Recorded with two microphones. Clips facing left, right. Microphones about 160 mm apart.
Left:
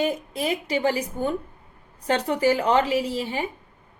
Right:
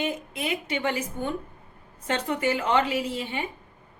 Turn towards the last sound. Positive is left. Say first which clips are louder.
# left 4 dB
turn(degrees=35)  # may be behind; listen again after turning